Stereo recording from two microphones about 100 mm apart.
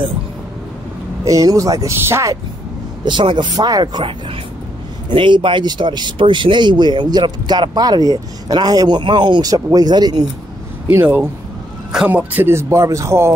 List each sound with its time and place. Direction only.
1.2 s speech: 35° right (ahead or behind)
3.1 s speech: 50° right (ahead or behind)
5.1 s speech: 55° right (ahead or behind)
10.9 s speech: 20° right (ahead or behind)